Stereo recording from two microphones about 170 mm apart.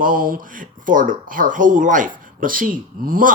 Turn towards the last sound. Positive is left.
turn(degrees=-55)  # may be behind; listen again after turning